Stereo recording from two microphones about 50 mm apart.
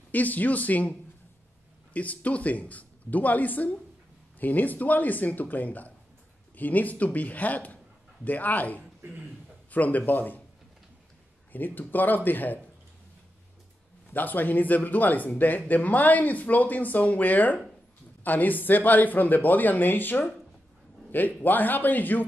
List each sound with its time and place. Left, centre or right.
0.1 s speech: left
2.0 s speech: left
11.5 s speech: left
14.1 s speech: left